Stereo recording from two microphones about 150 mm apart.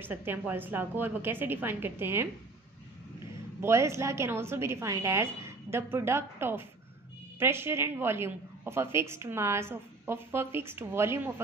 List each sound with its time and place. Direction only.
0.0 s a woman's voice: 15° right (ahead or behind)
3.6 s a woman's voice: 20° right (ahead or behind)